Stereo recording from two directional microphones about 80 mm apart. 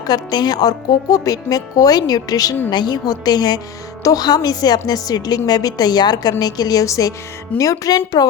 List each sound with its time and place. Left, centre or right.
0.1 s a woman's voice: left